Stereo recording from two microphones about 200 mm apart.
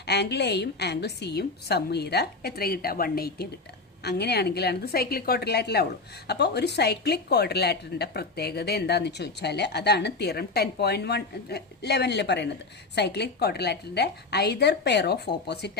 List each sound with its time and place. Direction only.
0.0 s a woman's voice: 55° left (ahead or behind)